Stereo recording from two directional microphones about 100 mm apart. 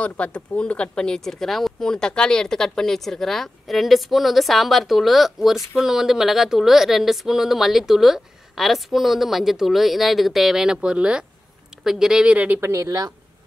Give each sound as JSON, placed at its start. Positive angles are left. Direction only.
{"t": 0.0, "sound": "a woman's voice", "side_deg": 10}